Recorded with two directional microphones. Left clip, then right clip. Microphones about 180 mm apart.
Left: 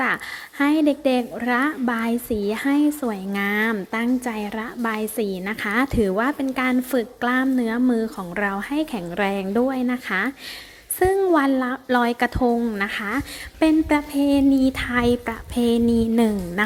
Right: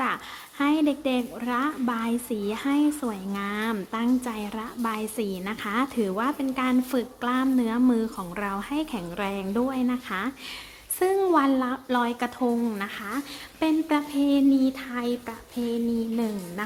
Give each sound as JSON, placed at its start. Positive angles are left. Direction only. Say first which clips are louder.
{"t": 0.6, "sound": "a woman's voice", "louder": "left 5 dB", "side_deg": 25}